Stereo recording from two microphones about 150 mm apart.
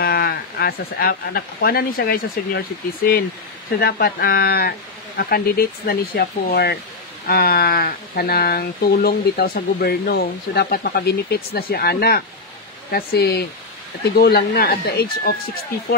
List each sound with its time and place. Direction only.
0.0 s speech: 90° left
3.8 s speech: 85° left